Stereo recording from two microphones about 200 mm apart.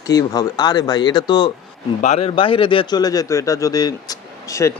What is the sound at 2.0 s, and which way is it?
Speech, 35° left (ahead or behind).